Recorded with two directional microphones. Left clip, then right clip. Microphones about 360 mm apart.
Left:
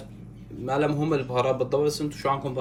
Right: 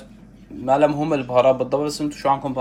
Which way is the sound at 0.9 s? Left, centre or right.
Centre.